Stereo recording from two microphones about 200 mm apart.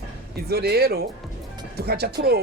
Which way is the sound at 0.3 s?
50° right (ahead or behind).